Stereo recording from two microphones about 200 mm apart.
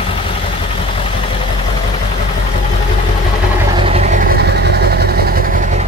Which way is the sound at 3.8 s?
30° right (ahead or behind).